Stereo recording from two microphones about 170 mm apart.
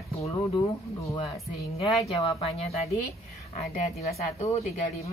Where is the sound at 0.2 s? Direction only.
20° left (ahead or behind).